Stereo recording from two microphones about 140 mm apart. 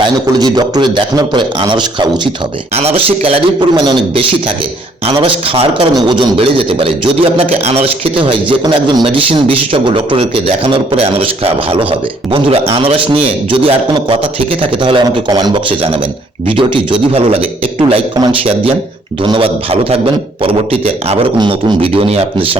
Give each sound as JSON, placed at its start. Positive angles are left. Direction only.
{"t": 0.0, "sound": "a man's voice", "side_deg": -30}
{"t": 2.7, "sound": "a man's voice", "side_deg": -45}
{"t": 21.3, "sound": "a man's voice", "side_deg": -35}